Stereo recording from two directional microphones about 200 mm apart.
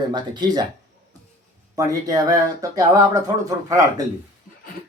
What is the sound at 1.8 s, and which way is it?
Speech, 20° right (ahead or behind).